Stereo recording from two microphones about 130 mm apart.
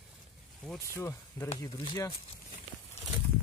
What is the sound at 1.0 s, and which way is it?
Speech, 20° left (ahead or behind).